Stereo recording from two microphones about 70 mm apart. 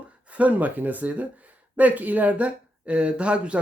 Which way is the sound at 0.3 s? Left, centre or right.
Right.